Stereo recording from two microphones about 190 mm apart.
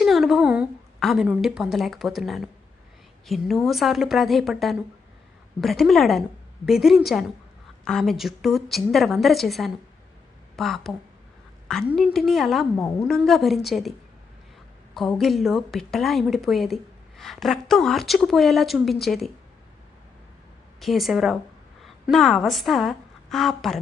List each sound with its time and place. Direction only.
0.0 s a woman's voice: centre (ahead or behind)
12.7 s a woman's voice: 15° left (ahead or behind)
13.1 s a woman's voice: centre (ahead or behind)
14.9 s a woman's voice: centre (ahead or behind)
20.7 s a woman's voice: centre (ahead or behind)